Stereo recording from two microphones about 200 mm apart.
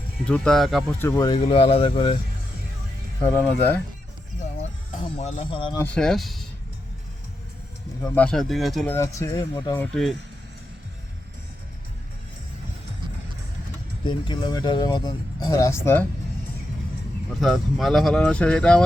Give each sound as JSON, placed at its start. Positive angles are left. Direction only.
{"t": 0.3, "sound": "speech", "side_deg": 5}
{"t": 1.0, "sound": "speech", "side_deg": 15}
{"t": 3.2, "sound": "speech", "side_deg": 10}
{"t": 5.2, "sound": "speech", "side_deg": 30}
{"t": 5.8, "sound": "speech", "side_deg": 5}
{"t": 8.0, "sound": "speech", "side_deg": 10}
{"t": 9.0, "sound": "speech", "side_deg": 15}
{"t": 9.8, "sound": "speech", "side_deg": 0}
{"t": 14.0, "sound": "speech", "side_deg": 25}
{"t": 17.4, "sound": "speech", "side_deg": 0}